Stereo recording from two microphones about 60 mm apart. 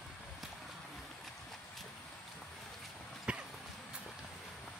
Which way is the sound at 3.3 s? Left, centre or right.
Centre.